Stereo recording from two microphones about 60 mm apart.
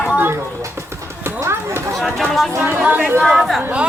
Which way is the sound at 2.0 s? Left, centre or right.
Centre.